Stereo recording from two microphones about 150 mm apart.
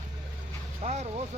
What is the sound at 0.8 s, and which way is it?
Music, 45° right (ahead or behind).